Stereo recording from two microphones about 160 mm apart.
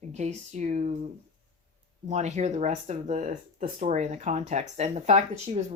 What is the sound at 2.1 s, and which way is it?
Speech, 45° right (ahead or behind).